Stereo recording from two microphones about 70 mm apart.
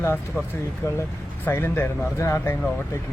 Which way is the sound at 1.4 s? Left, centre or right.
Left.